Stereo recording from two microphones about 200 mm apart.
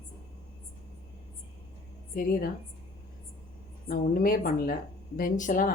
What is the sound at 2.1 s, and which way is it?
Speech, 45° left (ahead or behind).